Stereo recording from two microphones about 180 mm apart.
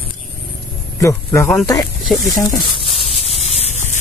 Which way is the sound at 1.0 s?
15° left (ahead or behind).